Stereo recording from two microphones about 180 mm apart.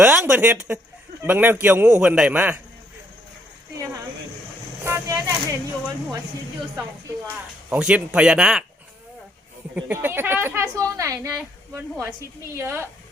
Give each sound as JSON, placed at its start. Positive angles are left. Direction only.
{"t": 0.0, "sound": "speech", "side_deg": -5}
{"t": 4.8, "sound": "vehicle", "side_deg": -15}
{"t": 7.7, "sound": "speech", "side_deg": -5}
{"t": 9.7, "sound": "speech", "side_deg": -10}